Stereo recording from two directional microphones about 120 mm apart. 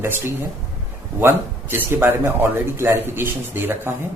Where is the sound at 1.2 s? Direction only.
20° right (ahead or behind).